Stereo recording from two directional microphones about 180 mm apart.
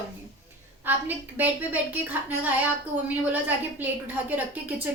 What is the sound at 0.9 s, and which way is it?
A woman's voice, 10° right (ahead or behind).